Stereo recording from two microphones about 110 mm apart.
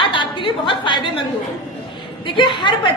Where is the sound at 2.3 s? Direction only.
45° left (ahead or behind).